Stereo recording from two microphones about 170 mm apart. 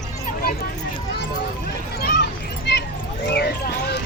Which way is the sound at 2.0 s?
75° left (ahead or behind).